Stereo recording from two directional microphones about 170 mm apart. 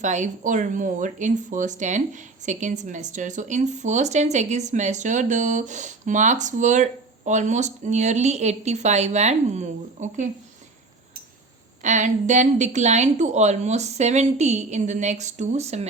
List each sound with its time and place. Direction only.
0.0 s speech: 45° right (ahead or behind)
11.8 s speech: 45° right (ahead or behind)